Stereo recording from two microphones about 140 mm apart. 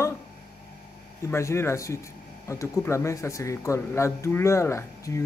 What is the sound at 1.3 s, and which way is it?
Speech, 20° left (ahead or behind).